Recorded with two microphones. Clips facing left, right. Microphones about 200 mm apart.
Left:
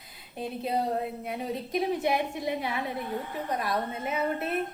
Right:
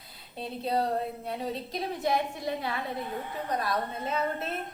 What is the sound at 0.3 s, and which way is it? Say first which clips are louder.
A woman's voice: even; 15° left (ahead or behind).